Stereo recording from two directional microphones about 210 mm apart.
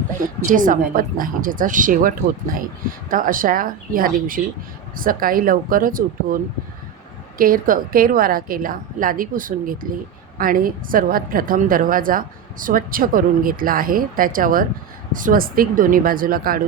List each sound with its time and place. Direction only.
0.2 s a woman's voice: 40° right (ahead or behind)